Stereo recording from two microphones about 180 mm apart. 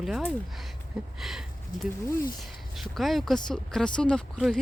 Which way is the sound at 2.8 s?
Centre (ahead or behind).